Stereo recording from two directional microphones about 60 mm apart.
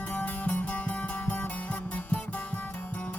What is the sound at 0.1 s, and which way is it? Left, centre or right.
Music, left.